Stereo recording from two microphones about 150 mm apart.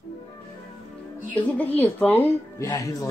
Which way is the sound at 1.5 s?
10° left (ahead or behind).